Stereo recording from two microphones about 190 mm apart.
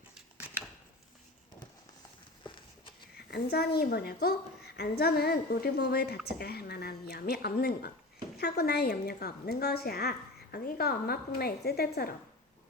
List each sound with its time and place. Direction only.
3.2 s a woman's voice: 55° left (ahead or behind)